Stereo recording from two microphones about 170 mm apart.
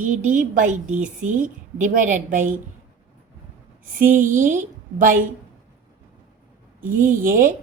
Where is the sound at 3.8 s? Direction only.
55° right (ahead or behind).